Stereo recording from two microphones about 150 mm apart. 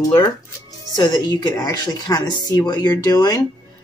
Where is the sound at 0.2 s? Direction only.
30° left (ahead or behind).